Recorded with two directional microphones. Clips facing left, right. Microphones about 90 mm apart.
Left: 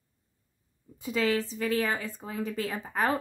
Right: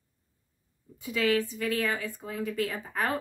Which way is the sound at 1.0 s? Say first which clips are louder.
Right 1 dB; 30° left (ahead or behind).